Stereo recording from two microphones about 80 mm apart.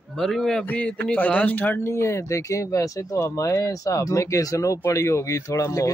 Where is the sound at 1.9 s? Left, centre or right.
Left.